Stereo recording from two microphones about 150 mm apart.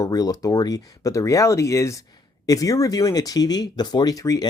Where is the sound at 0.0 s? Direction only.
25° left (ahead or behind).